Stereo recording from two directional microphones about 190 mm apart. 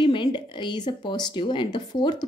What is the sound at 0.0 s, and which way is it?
Speech, 25° left (ahead or behind).